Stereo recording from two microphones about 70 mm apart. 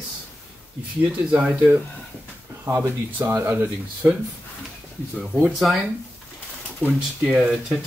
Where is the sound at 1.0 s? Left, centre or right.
Right.